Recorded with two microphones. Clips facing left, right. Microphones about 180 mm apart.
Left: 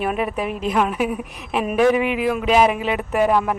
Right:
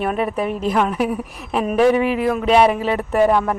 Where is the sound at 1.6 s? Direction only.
35° right (ahead or behind).